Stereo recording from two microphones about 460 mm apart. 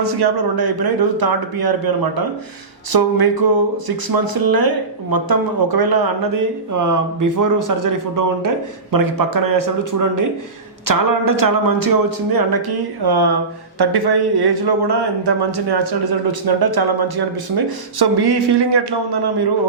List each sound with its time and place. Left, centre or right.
0.0 s speech: right